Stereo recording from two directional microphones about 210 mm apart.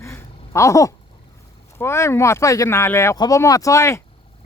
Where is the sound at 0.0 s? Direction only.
15° left (ahead or behind).